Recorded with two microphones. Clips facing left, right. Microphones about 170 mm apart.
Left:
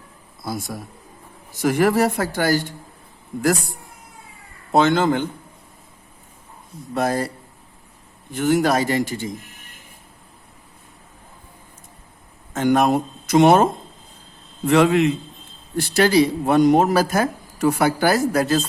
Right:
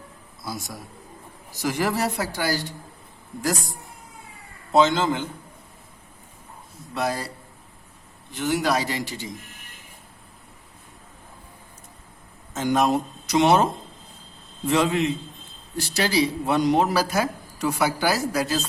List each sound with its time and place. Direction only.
0.4 s a man's voice: 55° left (ahead or behind)
4.7 s a man's voice: 55° left (ahead or behind)
6.9 s speech: 50° left (ahead or behind)
8.3 s speech: 50° left (ahead or behind)
12.5 s speech: 60° left (ahead or behind)
14.6 s a man's voice: 65° left (ahead or behind)